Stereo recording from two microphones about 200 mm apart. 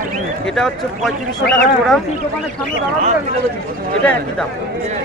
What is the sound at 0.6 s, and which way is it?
Speech, centre (ahead or behind).